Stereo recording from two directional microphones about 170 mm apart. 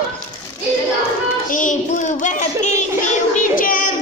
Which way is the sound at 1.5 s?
50° left (ahead or behind).